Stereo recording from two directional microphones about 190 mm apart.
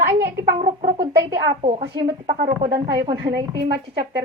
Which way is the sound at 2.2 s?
60° right (ahead or behind).